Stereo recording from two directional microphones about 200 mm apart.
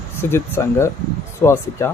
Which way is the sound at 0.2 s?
10° left (ahead or behind).